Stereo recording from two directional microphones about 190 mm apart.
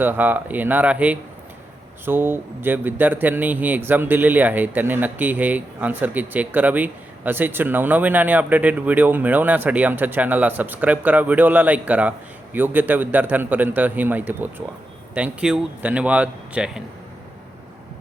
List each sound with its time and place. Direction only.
0.0 s speech: 10° right (ahead or behind)